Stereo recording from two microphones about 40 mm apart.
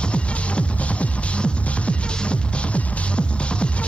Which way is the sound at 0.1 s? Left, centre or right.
Left.